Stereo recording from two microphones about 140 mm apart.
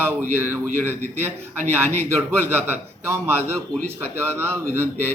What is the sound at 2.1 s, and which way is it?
A man's voice, 15° right (ahead or behind).